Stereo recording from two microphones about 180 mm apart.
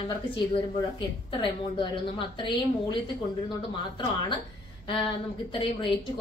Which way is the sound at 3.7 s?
25° left (ahead or behind).